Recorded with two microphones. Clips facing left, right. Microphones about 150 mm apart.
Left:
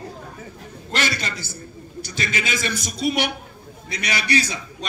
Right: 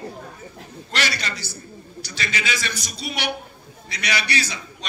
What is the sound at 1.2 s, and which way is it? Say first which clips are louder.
A man's voice: left 1 dB; 50° left (ahead or behind).